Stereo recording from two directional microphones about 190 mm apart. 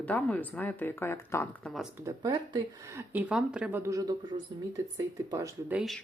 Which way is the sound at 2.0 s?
20° right (ahead or behind).